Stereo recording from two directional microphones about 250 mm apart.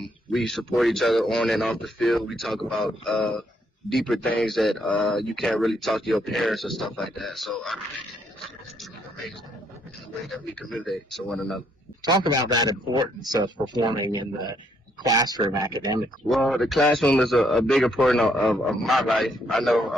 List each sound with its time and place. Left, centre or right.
0.3 s speech: centre
10.2 s speech: centre
12.0 s a man's voice: centre
16.3 s speech: centre